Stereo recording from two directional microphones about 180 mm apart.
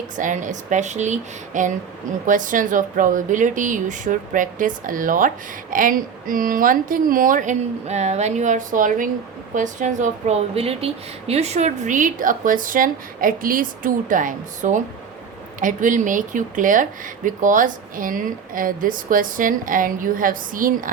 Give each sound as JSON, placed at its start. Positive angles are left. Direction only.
{"t": 0.2, "sound": "a woman's voice", "side_deg": -45}